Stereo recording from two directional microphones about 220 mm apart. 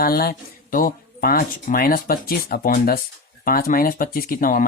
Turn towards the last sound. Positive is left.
turn(degrees=40)  # may be behind; listen again after turning